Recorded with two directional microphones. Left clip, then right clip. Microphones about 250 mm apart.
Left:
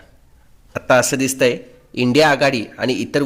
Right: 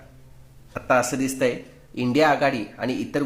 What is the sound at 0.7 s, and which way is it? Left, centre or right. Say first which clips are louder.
Speech: left 6 dB; left.